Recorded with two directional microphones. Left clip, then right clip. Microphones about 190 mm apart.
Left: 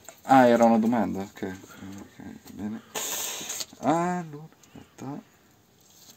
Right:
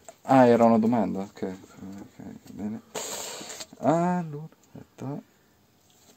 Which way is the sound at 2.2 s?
30° right (ahead or behind).